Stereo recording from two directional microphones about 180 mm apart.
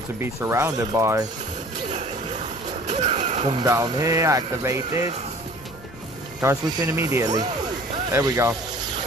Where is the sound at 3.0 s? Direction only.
35° right (ahead or behind).